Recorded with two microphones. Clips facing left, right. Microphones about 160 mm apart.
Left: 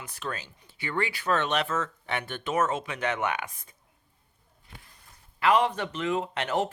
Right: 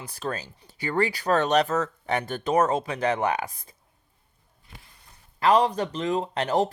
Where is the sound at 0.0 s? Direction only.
35° right (ahead or behind).